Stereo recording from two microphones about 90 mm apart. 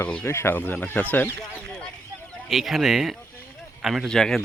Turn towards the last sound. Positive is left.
turn(degrees=5)  # may be behind; listen again after turning